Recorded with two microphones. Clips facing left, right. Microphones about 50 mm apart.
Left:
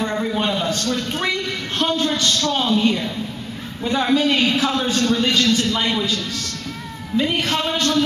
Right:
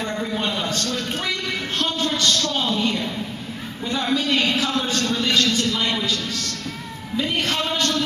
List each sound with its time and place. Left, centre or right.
0.0 s a sound: centre
0.7 s a man's voice: centre
2.4 s a sound: centre
3.8 s a man's voice: left
4.4 s a man's voice: centre
7.2 s a man's voice: centre